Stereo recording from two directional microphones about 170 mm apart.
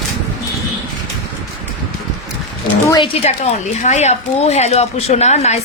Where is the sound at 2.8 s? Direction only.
25° left (ahead or behind).